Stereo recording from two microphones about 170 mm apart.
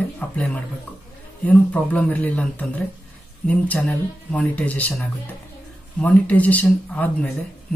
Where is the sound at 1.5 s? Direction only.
10° left (ahead or behind).